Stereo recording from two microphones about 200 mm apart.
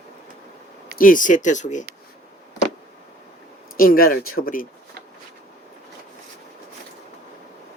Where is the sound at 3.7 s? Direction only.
45° left (ahead or behind).